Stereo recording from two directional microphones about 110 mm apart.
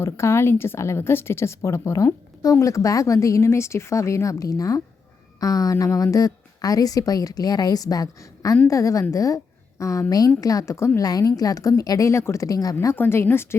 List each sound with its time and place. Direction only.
0.0 s a woman's voice: 25° left (ahead or behind)